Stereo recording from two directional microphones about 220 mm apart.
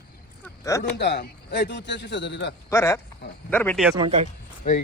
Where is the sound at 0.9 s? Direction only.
50° left (ahead or behind).